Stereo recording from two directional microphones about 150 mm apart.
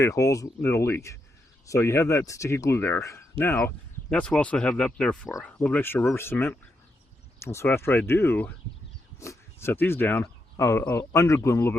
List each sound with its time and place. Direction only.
0.0 s speech: 20° left (ahead or behind)